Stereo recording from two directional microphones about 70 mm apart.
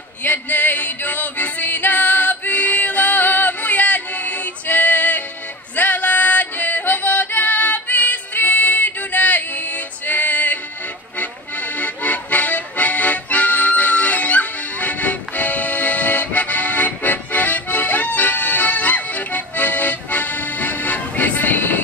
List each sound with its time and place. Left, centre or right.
0.2 s music: left